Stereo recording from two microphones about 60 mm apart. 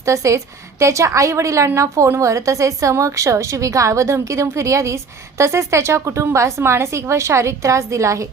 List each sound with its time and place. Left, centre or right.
0.0 s a woman's voice: right